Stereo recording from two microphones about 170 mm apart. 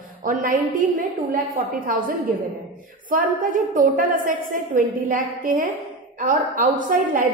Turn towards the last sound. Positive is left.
turn(degrees=-55)  # may be behind; listen again after turning